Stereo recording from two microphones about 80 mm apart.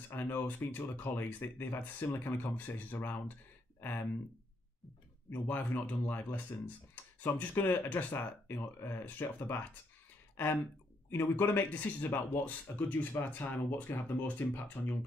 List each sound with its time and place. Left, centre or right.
0.1 s speech: left
5.3 s speech: left